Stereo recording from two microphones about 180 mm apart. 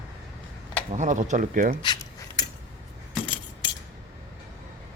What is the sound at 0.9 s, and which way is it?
Speech, 40° right (ahead or behind).